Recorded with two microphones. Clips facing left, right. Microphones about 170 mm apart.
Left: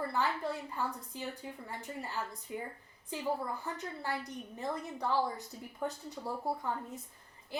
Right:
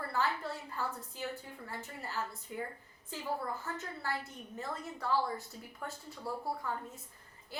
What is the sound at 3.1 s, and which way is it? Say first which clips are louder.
A woman's voice: left 2 dB; 15° left (ahead or behind).